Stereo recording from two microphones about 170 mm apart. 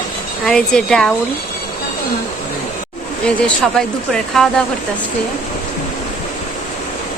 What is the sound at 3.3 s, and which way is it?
Speech, 5° left (ahead or behind).